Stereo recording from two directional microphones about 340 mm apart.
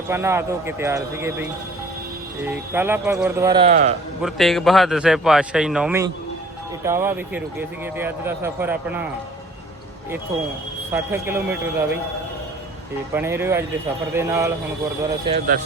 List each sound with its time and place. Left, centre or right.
0.1 s a man's voice: centre
2.7 s a man's voice: centre
4.2 s a man's voice: centre
10.9 s a man's voice: centre
13.1 s a man's voice: centre
15.3 s speech: right